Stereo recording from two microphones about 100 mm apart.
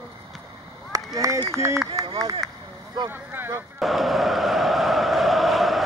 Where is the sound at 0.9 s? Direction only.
35° right (ahead or behind).